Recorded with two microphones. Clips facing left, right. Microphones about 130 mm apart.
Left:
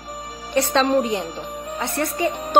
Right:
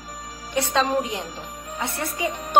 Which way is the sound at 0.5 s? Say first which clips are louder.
Left 4 dB; 10° right (ahead or behind).